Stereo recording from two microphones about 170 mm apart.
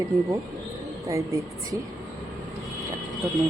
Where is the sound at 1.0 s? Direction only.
20° right (ahead or behind).